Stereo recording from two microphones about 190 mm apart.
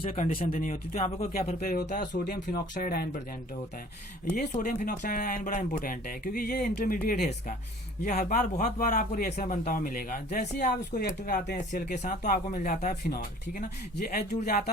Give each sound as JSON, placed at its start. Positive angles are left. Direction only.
{"t": 0.0, "sound": "speech", "side_deg": 35}
{"t": 4.4, "sound": "speech", "side_deg": 45}